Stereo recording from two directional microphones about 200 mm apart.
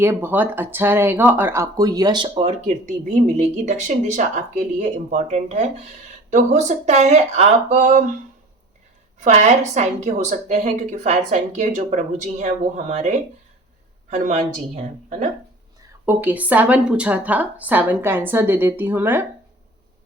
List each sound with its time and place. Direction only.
0.0 s a woman's voice: 10° right (ahead or behind); by 8.0 s 35° right (ahead or behind)
9.2 s a woman's voice: 35° right (ahead or behind)
16.0 s speech: 10° right (ahead or behind)